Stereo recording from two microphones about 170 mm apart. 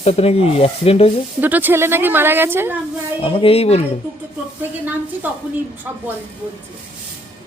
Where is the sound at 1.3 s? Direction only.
10° right (ahead or behind).